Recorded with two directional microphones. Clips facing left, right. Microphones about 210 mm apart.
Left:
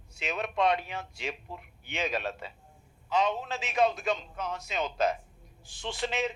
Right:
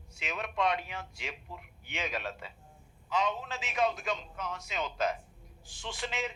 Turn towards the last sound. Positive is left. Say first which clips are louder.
# left 5 dB
turn(degrees=30)  # may be behind; listen again after turning